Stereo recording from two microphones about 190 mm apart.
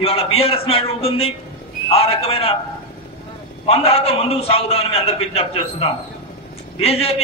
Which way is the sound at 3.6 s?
30° left (ahead or behind).